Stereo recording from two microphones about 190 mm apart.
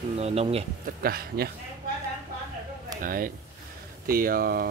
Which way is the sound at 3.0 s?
45° right (ahead or behind).